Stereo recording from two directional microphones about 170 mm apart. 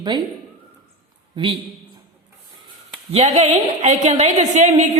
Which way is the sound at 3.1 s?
40° right (ahead or behind).